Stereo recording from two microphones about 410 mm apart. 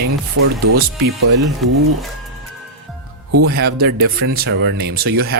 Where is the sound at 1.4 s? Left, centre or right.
Centre.